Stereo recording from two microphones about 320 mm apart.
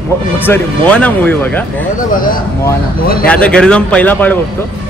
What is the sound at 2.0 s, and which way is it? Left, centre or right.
Speech, left.